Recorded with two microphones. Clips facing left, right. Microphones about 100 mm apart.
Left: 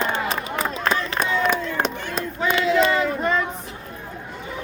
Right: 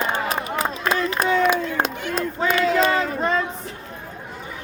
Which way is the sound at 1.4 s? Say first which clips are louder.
Right 2 dB; 5° right (ahead or behind).